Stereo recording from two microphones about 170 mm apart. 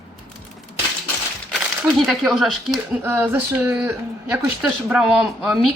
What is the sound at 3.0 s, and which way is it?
Speech, 15° right (ahead or behind).